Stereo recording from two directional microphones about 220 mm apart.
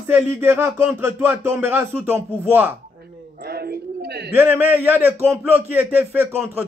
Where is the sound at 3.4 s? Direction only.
45° right (ahead or behind).